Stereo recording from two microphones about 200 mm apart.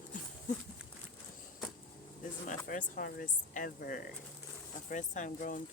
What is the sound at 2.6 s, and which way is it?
Speech, 40° left (ahead or behind).